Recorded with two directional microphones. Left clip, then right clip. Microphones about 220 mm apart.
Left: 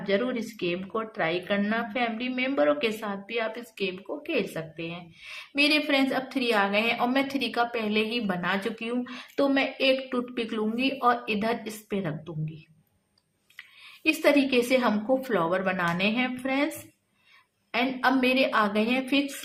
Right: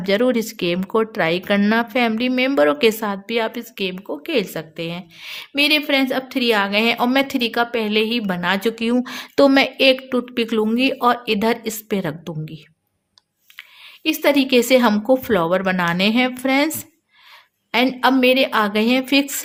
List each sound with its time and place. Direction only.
0.0 s speech: 50° right (ahead or behind)
13.6 s speech: 35° right (ahead or behind)
17.7 s speech: 45° right (ahead or behind)